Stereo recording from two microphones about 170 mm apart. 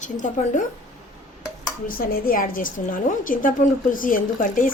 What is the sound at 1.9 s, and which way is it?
A woman's voice, 60° left (ahead or behind).